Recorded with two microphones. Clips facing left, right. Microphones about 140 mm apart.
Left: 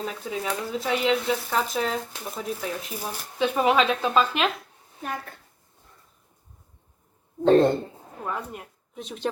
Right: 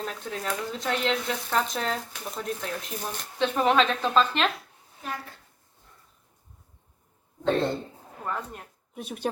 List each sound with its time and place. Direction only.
0.0 s speech: 5° left (ahead or behind)
7.4 s a man's voice: 40° left (ahead or behind)
8.2 s speech: 5° left (ahead or behind)
9.0 s speech: 10° right (ahead or behind)